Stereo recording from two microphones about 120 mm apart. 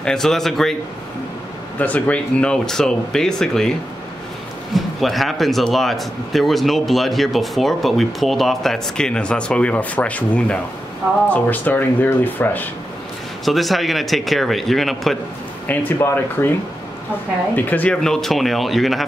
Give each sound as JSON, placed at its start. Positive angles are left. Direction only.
{"t": 0.0, "sound": "a man's voice", "side_deg": 5}
{"t": 1.8, "sound": "a man's voice", "side_deg": 15}
{"t": 4.7, "sound": "a man's voice", "side_deg": 0}
{"t": 13.5, "sound": "a man's voice", "side_deg": 0}
{"t": 15.7, "sound": "speech", "side_deg": 15}
{"t": 17.6, "sound": "a man's voice", "side_deg": 15}